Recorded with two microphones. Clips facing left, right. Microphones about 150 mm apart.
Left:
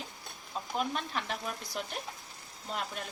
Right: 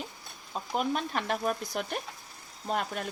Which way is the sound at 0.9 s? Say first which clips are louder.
Right 5 dB; 50° right (ahead or behind).